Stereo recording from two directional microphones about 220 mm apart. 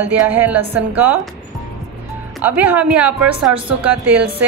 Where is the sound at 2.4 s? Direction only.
5° right (ahead or behind).